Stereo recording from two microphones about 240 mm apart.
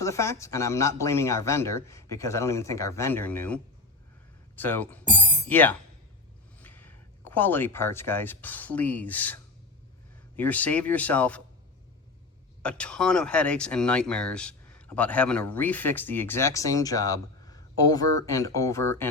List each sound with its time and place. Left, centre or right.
0.0 s speech: centre
5.0 s a sound: centre
5.5 s speech: centre
12.6 s speech: centre